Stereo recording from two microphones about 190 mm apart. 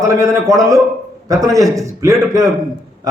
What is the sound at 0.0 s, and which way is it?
A man's voice, 15° right (ahead or behind).